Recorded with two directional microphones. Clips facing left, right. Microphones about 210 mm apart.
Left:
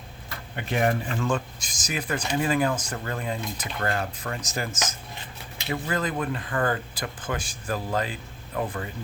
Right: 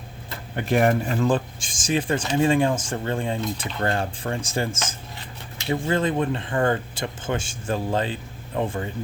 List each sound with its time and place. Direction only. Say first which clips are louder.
0.5 s speech: right 5 dB; 50° right (ahead or behind); by 8.9 s 25° right (ahead or behind)